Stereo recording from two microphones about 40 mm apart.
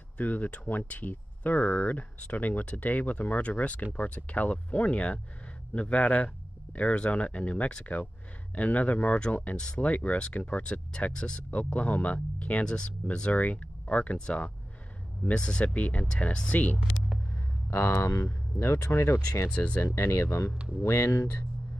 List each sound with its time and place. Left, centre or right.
0.2 s speech: left
10.6 s speech: left
11.5 s speech: left
12.6 s speech: left
13.3 s speech: left
14.1 s speech: left
15.6 s speech: left
17.6 s speech: left
19.5 s speech: left
19.8 s speech: left